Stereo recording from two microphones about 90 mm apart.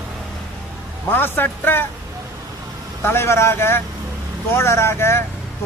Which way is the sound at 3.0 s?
30° left (ahead or behind).